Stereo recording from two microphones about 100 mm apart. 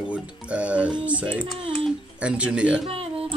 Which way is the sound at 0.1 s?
10° right (ahead or behind).